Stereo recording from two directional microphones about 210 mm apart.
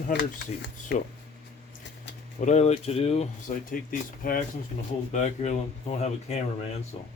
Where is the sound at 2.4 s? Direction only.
35° left (ahead or behind).